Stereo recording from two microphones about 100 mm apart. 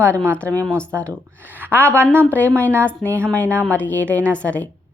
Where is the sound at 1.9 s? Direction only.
15° left (ahead or behind).